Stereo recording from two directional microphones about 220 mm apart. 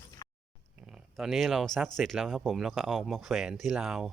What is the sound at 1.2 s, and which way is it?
Speech, centre (ahead or behind).